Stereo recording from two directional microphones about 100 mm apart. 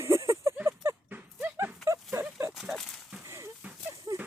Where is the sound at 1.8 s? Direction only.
30° right (ahead or behind).